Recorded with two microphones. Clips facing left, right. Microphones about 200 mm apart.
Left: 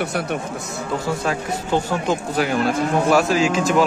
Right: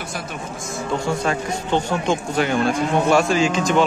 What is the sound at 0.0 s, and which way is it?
Speech, 65° left (ahead or behind).